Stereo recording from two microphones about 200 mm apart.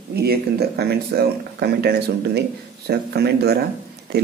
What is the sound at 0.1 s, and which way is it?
Speech, 55° right (ahead or behind).